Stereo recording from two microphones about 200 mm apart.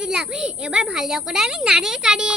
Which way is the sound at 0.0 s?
5° right (ahead or behind).